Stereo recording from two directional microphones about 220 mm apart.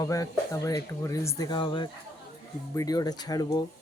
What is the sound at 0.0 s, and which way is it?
Speech, 15° left (ahead or behind).